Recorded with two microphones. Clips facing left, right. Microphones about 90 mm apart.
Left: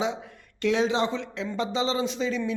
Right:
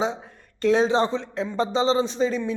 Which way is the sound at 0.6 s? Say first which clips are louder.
Right 4 dB; 35° right (ahead or behind).